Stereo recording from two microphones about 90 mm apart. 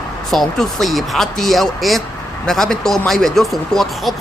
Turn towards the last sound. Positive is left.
turn(degrees=0)  # may be behind; listen again after turning